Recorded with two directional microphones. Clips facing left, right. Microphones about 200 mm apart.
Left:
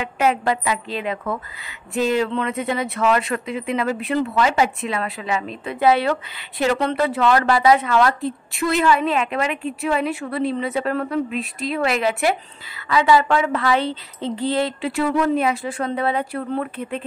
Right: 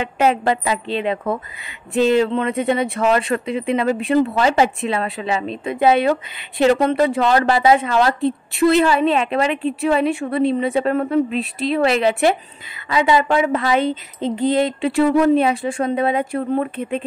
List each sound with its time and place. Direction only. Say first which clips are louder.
0.0 s a woman's voice: right 3 dB; 25° right (ahead or behind)
13.8 s a sound: right 4 dB; 50° right (ahead or behind)
14.5 s a woman's voice: right 4 dB; 25° right (ahead or behind)